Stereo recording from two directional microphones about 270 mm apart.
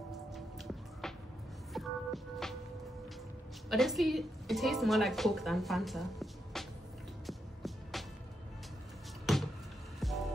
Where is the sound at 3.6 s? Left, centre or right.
Centre.